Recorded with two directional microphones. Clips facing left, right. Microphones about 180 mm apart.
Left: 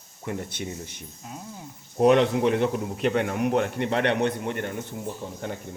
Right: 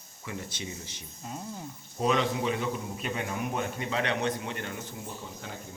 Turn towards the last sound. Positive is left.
turn(degrees=55)  # may be behind; listen again after turning